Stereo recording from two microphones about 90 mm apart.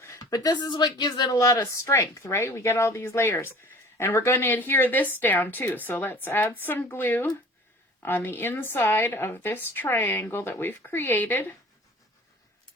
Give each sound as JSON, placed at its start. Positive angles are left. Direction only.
{"t": 0.0, "sound": "a sound", "side_deg": 35}
{"t": 0.3, "sound": "speech", "side_deg": 50}
{"t": 1.4, "sound": "speech", "side_deg": 40}